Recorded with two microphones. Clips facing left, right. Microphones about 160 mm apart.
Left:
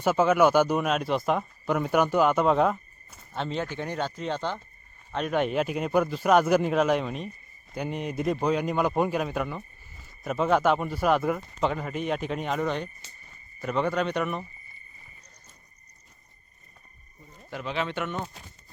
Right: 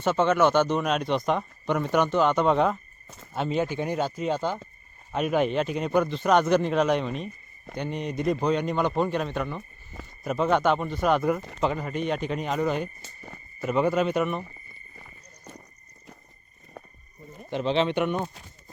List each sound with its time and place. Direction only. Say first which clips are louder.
0.0 s speech: left 1 dB; 5° left (ahead or behind)
3.3 s speech: right 4 dB; 10° right (ahead or behind)
13.2 s a sound: right 5 dB; 75° right (ahead or behind)
13.7 s speech: right 3 dB; 5° right (ahead or behind)
14.9 s clip-clop: right 6 dB; 85° right
17.5 s speech: right 7 dB; 25° right (ahead or behind)